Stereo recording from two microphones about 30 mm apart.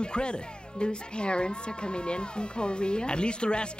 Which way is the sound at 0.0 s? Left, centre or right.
Left.